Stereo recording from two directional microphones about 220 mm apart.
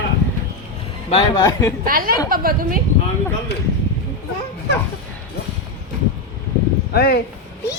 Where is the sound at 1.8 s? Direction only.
40° right (ahead or behind).